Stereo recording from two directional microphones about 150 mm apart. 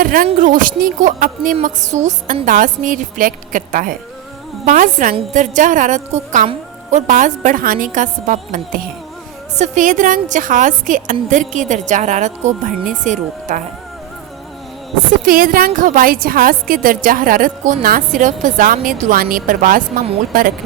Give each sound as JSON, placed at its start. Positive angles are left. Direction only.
{"t": 0.0, "sound": "a sound", "side_deg": -70}
{"t": 0.3, "sound": "a woman's voice", "side_deg": -60}
{"t": 15.2, "sound": "a woman's voice", "side_deg": -70}